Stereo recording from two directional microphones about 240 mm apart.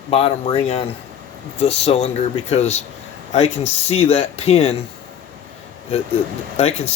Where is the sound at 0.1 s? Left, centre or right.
Left.